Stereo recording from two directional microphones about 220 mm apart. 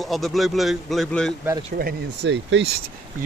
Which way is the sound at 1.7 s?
50° right (ahead or behind).